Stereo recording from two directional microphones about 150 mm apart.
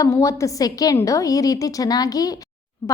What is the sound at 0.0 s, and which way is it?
A woman's voice, 20° left (ahead or behind).